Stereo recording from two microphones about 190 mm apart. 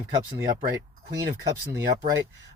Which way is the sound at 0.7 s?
20° right (ahead or behind).